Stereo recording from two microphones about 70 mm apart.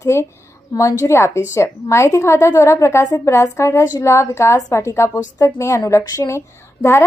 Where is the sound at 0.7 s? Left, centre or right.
Left.